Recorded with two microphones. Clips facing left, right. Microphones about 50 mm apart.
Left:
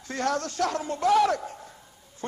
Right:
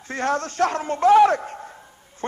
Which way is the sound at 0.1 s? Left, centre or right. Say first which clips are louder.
Right 4 dB; right.